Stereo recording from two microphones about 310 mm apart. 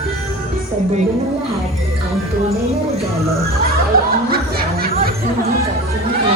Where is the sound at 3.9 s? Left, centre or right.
Right.